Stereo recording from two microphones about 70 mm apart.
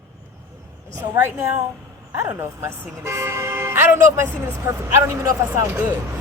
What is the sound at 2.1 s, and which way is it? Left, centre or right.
Speech, right.